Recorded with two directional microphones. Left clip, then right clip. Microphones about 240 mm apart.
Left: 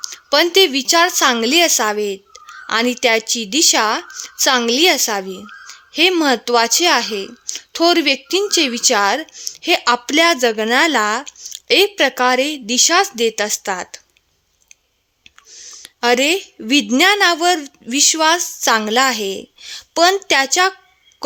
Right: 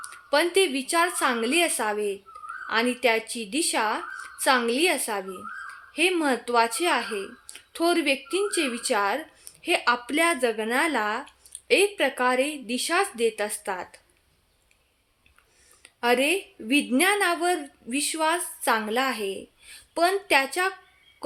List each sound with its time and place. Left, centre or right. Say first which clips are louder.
0.1 s a woman's voice: left 9 dB; left
15.6 s a woman's voice: left 8 dB; left